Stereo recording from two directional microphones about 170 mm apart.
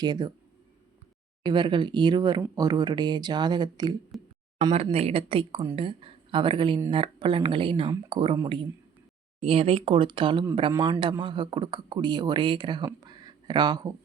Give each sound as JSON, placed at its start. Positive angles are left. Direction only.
{"t": 0.0, "sound": "speech", "side_deg": -25}
{"t": 1.5, "sound": "speech", "side_deg": -30}
{"t": 4.1, "sound": "speech", "side_deg": 0}
{"t": 4.7, "sound": "speech", "side_deg": -35}